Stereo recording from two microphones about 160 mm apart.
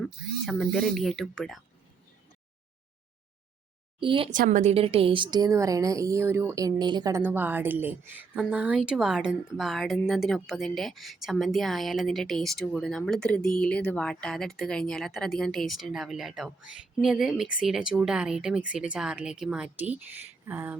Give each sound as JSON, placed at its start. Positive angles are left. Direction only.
{"t": 0.0, "sound": "a woman's voice", "side_deg": 0}
{"t": 4.0, "sound": "speech", "side_deg": -35}
{"t": 4.3, "sound": "a woman's voice", "side_deg": -55}
{"t": 7.2, "sound": "a woman's voice", "side_deg": -10}
{"t": 20.4, "sound": "a sound", "side_deg": -10}